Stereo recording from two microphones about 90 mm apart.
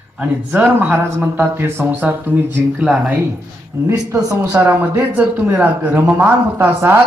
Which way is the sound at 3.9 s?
40° right (ahead or behind).